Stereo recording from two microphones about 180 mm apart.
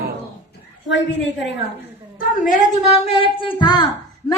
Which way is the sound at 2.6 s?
40° left (ahead or behind).